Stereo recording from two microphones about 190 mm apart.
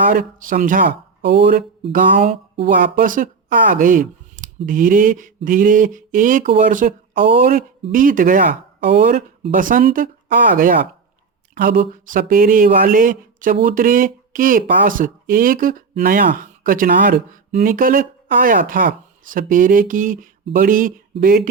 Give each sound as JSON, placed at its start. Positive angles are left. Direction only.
{"t": 0.0, "sound": "speech", "side_deg": -45}
{"t": 1.2, "sound": "speech", "side_deg": -65}
{"t": 1.9, "sound": "speech", "side_deg": -45}